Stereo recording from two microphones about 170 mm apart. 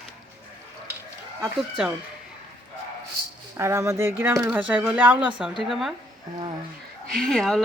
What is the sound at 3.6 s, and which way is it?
Speech, 15° right (ahead or behind).